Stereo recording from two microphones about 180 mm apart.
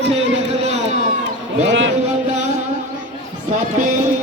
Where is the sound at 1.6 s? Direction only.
90° right.